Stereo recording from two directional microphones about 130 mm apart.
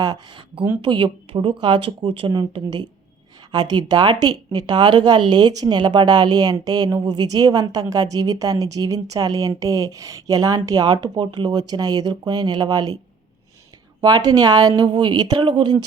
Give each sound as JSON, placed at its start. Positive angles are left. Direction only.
{"t": 0.0, "sound": "speech", "side_deg": -35}
{"t": 14.0, "sound": "speech", "side_deg": -30}